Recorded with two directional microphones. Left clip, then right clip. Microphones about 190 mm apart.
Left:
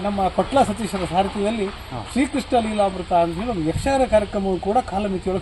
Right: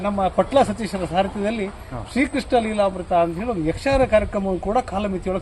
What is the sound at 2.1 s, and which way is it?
Speech, 15° left (ahead or behind).